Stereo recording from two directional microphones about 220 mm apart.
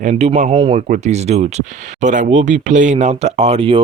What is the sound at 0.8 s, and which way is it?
Speech, 35° right (ahead or behind).